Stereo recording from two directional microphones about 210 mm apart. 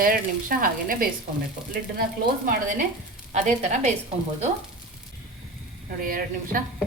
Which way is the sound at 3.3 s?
35° right (ahead or behind).